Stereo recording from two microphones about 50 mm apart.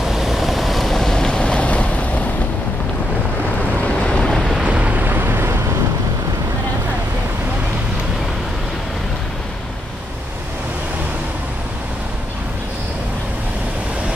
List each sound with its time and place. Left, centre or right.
0.1 s vehicle: centre; by 2.2 s left
3.8 s waves: centre
4.6 s boat: right
5.0 s vehicle: right